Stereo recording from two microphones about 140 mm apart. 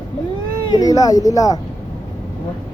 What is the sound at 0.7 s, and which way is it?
Speech, 25° left (ahead or behind).